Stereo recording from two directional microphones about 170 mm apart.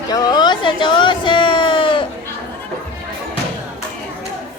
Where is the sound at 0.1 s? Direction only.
25° left (ahead or behind).